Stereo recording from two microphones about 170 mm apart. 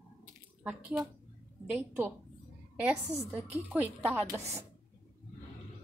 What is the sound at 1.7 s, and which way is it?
Speech, 10° right (ahead or behind).